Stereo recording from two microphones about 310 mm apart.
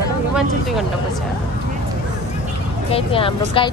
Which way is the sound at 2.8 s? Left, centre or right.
Centre.